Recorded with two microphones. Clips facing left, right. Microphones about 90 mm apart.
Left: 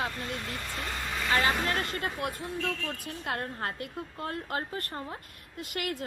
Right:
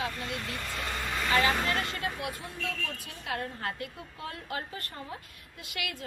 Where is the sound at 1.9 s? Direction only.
50° left (ahead or behind).